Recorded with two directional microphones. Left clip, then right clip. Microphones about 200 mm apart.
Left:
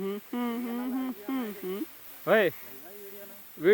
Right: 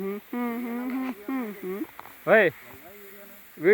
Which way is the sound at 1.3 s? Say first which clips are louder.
Right 1 dB; centre (ahead or behind).